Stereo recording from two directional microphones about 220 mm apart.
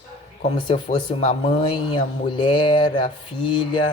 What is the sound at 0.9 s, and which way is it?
Speech, 25° left (ahead or behind).